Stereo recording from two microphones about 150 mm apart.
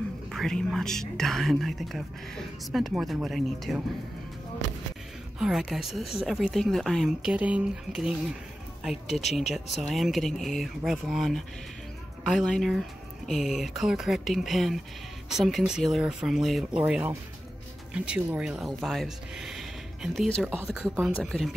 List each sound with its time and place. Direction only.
0.3 s speech: 5° left (ahead or behind)
5.4 s speech: 5° right (ahead or behind)
9.0 s speech: 45° left (ahead or behind)
9.5 s speech: centre (ahead or behind)